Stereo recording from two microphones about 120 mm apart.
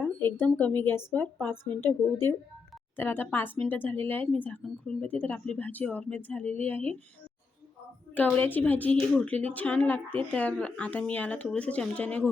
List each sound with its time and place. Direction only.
0.0 s a sound: 15° left (ahead or behind)
0.5 s a woman's voice: 15° left (ahead or behind)
8.1 s speech: 15° left (ahead or behind)